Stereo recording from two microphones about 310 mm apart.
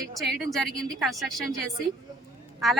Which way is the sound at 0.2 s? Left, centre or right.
Centre.